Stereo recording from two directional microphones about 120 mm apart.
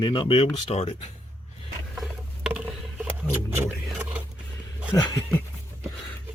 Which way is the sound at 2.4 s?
10° right (ahead or behind).